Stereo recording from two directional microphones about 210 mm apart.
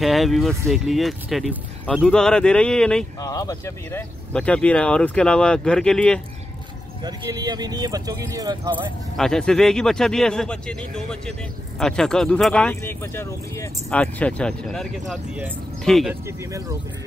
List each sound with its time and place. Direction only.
0.0 s speech: centre (ahead or behind)
3.2 s speech: 15° left (ahead or behind)
7.0 s speech: 20° right (ahead or behind)
9.1 s speech: centre (ahead or behind)
16.3 s speech: 15° right (ahead or behind)